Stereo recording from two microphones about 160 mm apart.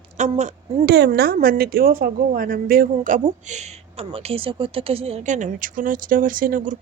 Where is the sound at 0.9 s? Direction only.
90° right; by 3.2 s 60° right (ahead or behind).